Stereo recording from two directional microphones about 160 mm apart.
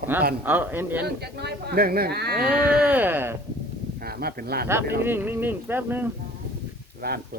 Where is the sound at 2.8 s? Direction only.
10° right (ahead or behind).